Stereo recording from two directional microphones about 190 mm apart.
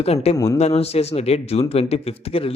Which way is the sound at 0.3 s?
15° left (ahead or behind).